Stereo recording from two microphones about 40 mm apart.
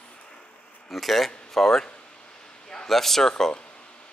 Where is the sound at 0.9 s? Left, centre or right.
Centre.